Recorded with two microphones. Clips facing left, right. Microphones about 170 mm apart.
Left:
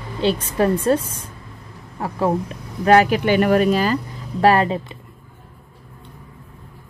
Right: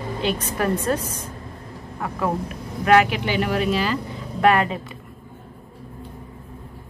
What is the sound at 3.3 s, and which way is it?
Speech, 50° left (ahead or behind).